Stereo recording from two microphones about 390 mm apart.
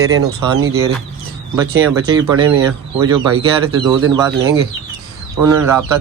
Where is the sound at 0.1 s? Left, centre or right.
Right.